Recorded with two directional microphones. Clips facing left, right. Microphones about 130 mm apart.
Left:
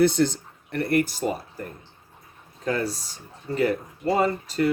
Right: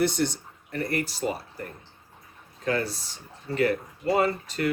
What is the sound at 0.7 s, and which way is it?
Speech, 60° left (ahead or behind).